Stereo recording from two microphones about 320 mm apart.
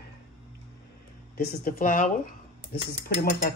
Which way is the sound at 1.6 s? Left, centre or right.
Left.